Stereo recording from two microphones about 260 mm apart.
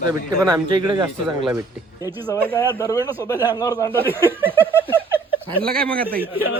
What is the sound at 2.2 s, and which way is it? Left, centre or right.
Speech, centre.